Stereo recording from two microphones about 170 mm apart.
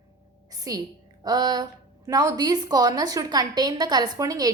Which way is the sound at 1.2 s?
25° right (ahead or behind).